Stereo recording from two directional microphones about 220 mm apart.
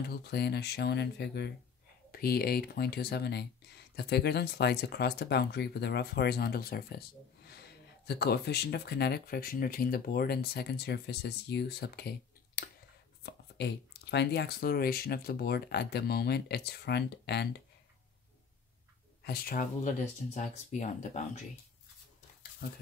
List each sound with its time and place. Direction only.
0.0 s speech: 45° left (ahead or behind)
19.2 s speech: 45° left (ahead or behind)
22.6 s speech: 45° left (ahead or behind)